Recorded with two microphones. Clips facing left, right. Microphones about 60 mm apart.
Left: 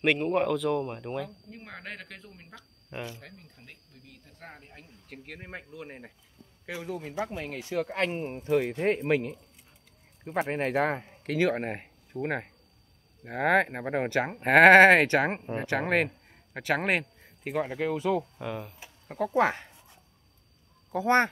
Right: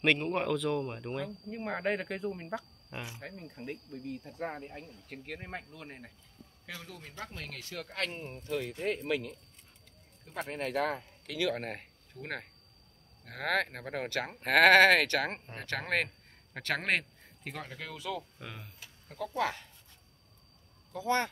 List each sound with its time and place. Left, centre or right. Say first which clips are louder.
0.0 s speech: left 4 dB; centre
1.5 s speech: right 9 dB; centre
4.8 s speech: right 1 dB; centre; by 8.3 s left
8.8 s speech: left 7 dB; left
10.5 s speech: left 4 dB; left
11.6 s speech: left 6 dB; centre
17.6 s speech: left 11 dB; left
18.4 s speech: left 11 dB; centre
19.1 s speech: left 8 dB; left
20.9 s speech: left 7 dB; left